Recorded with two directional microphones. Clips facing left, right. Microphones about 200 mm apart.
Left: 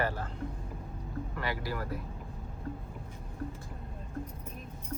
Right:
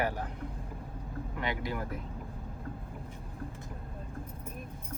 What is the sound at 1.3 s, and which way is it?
Speech, 20° right (ahead or behind).